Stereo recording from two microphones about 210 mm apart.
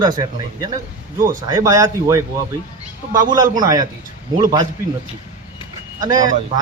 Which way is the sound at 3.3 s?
20° right (ahead or behind).